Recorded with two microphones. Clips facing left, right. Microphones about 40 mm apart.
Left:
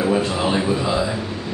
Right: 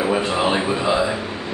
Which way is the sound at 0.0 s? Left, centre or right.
Centre.